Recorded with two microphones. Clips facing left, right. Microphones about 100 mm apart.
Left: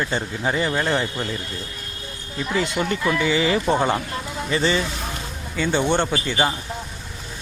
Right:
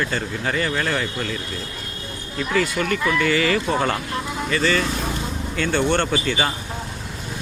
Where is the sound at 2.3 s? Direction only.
20° left (ahead or behind).